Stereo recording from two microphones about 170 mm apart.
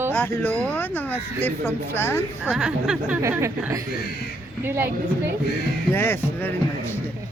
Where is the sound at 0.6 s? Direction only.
10° left (ahead or behind).